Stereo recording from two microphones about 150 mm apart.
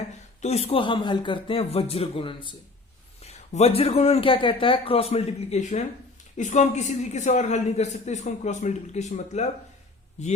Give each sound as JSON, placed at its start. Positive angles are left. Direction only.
{"t": 0.4, "sound": "speech", "side_deg": 45}
{"t": 3.2, "sound": "a woman's voice", "side_deg": 45}